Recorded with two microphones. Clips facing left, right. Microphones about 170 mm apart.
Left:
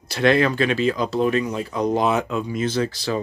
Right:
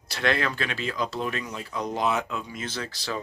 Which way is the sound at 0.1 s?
20° left (ahead or behind).